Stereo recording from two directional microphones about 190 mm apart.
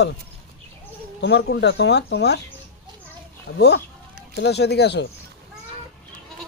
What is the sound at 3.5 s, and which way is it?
Speech, 55° left (ahead or behind).